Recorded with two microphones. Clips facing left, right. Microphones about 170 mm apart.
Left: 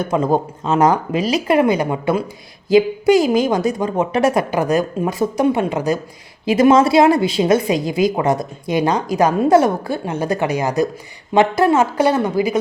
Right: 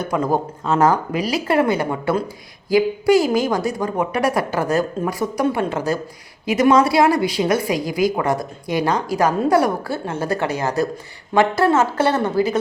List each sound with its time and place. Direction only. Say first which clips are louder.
0.0 s a woman's voice: left 3 dB; 20° left (ahead or behind)
6.4 s a woman's voice: left 3 dB; 25° left (ahead or behind); by 12.5 s 10° left (ahead or behind)